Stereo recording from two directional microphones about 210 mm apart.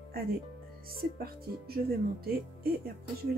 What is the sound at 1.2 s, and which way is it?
Speech, 45° right (ahead or behind).